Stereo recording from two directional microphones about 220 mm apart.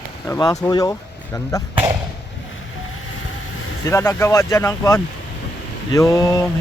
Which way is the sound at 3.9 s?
10° left (ahead or behind).